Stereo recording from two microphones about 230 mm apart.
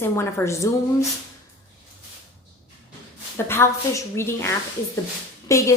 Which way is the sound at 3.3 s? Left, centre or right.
Centre.